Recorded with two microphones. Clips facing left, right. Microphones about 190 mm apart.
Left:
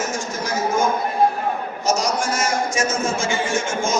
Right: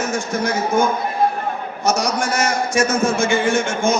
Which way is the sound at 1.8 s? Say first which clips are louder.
Right 2 dB; 60° right (ahead or behind).